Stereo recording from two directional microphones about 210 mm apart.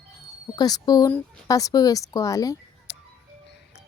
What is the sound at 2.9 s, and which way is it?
Music, 55° left (ahead or behind).